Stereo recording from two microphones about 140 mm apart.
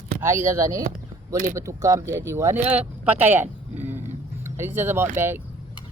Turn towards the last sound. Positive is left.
turn(degrees=-15)  # may be behind; listen again after turning